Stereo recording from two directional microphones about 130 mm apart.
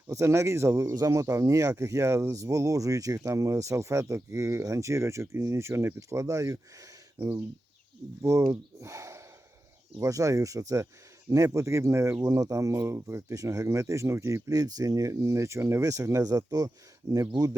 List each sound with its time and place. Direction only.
0.1 s speech: 20° right (ahead or behind)
8.2 s speech: 20° right (ahead or behind)